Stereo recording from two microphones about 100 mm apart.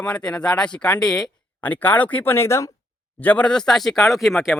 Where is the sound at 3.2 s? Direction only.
15° left (ahead or behind); by 4.5 s centre (ahead or behind).